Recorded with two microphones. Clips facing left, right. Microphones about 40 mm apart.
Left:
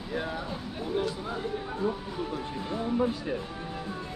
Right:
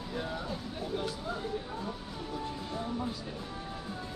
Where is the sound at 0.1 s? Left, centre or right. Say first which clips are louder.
Left 4 dB; left.